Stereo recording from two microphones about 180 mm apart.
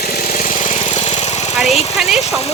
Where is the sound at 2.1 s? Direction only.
35° left (ahead or behind).